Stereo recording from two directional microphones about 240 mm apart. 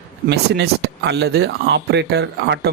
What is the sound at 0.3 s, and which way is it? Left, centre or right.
Speech, right.